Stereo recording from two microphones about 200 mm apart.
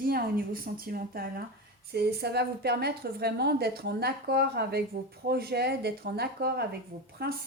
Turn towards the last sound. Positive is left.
turn(degrees=-50)  # may be behind; listen again after turning